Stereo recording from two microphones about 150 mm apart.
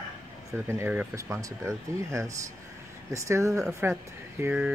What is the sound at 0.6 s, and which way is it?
Speech, 15° right (ahead or behind).